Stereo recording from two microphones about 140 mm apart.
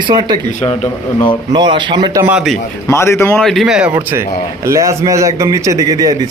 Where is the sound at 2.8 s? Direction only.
20° left (ahead or behind).